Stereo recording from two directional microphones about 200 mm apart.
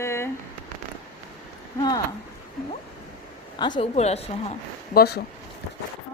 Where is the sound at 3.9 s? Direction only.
30° left (ahead or behind).